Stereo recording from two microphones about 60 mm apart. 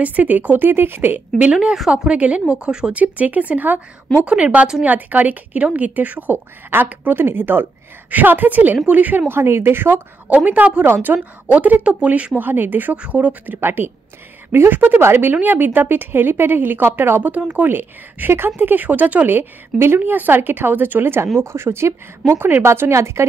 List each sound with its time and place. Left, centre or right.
0.0 s a woman's voice: right
1.4 s a woman's voice: centre
9.3 s a woman's voice: right
10.3 s a woman's voice: right
12.4 s a woman's voice: right
12.9 s a woman's voice: right
17.3 s a woman's voice: right
17.6 s a woman's voice: right